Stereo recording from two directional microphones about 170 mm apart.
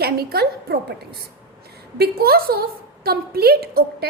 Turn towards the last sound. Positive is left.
turn(degrees=-65)  # may be behind; listen again after turning